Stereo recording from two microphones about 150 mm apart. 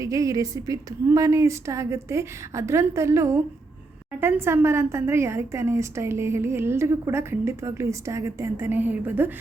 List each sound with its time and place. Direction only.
0.0 s a woman's voice: 20° right (ahead or behind)